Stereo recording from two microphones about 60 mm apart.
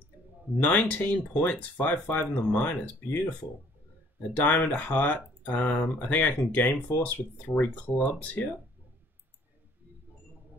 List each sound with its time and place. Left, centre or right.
0.6 s speech: left
4.5 s speech: left